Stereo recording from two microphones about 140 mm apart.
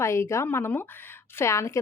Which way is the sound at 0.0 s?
20° left (ahead or behind).